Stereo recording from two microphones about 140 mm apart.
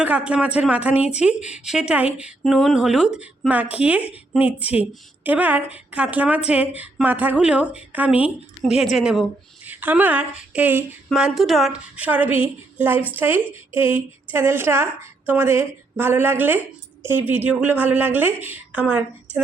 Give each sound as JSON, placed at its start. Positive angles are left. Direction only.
{"t": 0.0, "sound": "a woman's voice", "side_deg": -10}
{"t": 11.1, "sound": "a woman's voice", "side_deg": 0}